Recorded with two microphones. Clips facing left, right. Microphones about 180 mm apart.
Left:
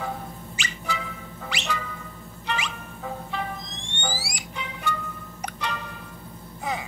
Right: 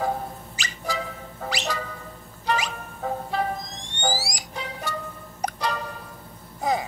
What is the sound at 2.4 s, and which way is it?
Music, 40° right (ahead or behind).